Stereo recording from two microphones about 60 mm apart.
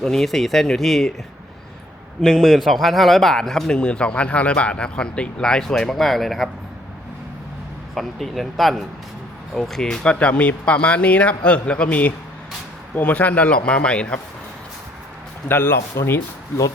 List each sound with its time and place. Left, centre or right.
0.0 s a man's voice: centre
2.2 s a man's voice: centre
3.7 s speech: centre
7.9 s a man's voice: centre
15.4 s a man's voice: left